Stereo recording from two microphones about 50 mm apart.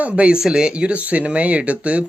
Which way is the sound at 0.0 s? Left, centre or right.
Right.